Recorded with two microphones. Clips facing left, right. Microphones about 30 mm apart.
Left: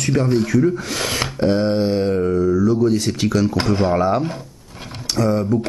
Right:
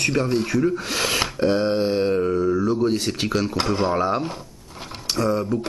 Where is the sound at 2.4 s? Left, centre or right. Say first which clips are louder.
Left 4 dB; right.